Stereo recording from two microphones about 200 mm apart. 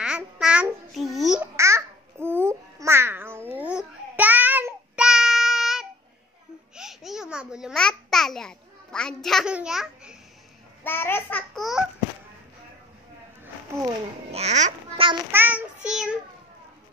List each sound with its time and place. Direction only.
0.0 s babbling: 5° right (ahead or behind)
1.6 s babbling: 15° right (ahead or behind)
10.8 s a child's voice: 10° left (ahead or behind)
14.3 s babbling: 35° right (ahead or behind)
15.3 s child singing: 10° right (ahead or behind)